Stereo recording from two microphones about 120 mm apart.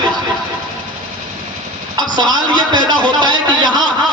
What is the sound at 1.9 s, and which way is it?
A man's voice, 40° right (ahead or behind).